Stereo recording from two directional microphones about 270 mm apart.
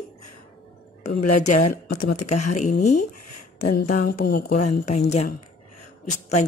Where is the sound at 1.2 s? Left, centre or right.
Left.